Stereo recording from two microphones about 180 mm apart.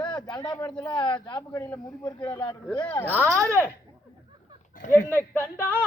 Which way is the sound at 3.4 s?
15° right (ahead or behind).